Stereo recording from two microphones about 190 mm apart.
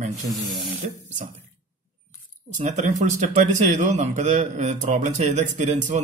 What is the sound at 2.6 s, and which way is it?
Speech, 40° right (ahead or behind).